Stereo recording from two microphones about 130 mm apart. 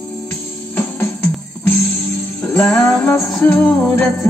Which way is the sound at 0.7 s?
15° left (ahead or behind).